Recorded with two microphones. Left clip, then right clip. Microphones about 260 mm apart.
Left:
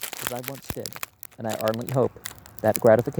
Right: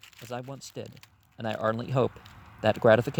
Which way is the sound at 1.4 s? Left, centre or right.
Right.